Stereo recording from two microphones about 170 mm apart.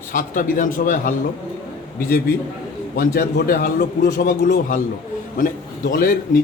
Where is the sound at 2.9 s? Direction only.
60° left (ahead or behind).